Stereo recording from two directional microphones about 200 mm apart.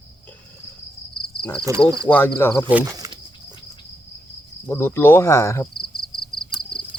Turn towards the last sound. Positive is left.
turn(degrees=0)  # may be behind; listen again after turning